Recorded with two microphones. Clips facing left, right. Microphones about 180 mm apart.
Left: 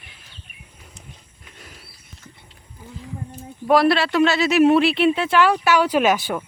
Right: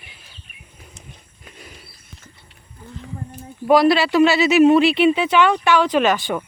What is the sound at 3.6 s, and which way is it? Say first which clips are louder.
Speech: right 2 dB; centre (ahead or behind).